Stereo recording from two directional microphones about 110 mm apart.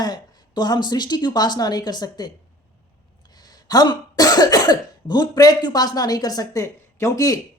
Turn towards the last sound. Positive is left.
turn(degrees=30)  # may be behind; listen again after turning